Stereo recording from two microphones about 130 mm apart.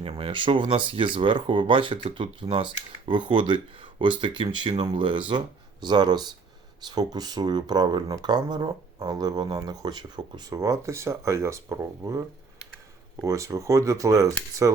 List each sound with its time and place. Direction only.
0.2 s speech: 40° right (ahead or behind); by 12.2 s 20° right (ahead or behind)
13.2 s speech: 25° right (ahead or behind)